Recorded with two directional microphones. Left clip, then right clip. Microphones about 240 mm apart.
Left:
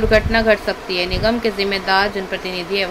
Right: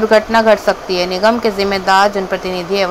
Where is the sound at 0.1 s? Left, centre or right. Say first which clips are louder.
Right 5 dB; centre.